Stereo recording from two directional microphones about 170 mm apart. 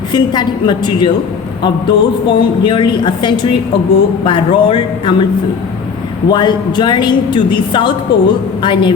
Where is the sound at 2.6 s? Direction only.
25° left (ahead or behind).